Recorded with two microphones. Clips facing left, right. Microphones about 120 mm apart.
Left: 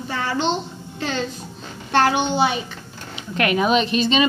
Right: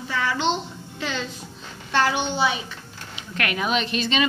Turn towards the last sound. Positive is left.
turn(degrees=25)  # may be behind; listen again after turning